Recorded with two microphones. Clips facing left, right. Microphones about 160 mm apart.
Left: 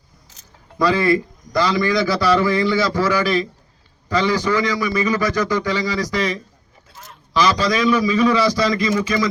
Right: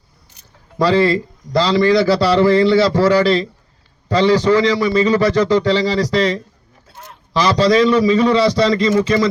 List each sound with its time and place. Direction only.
0.8 s a man's voice: 30° right (ahead or behind)
6.1 s speech: 65° right (ahead or behind)
7.3 s a man's voice: 30° right (ahead or behind)